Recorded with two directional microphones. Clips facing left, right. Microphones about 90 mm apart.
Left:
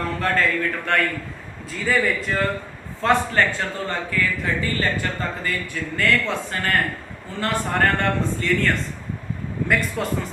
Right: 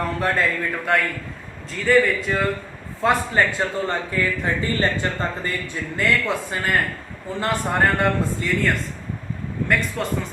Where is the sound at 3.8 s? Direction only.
25° right (ahead or behind).